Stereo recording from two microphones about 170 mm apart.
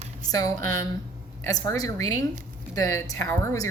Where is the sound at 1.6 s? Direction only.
20° left (ahead or behind).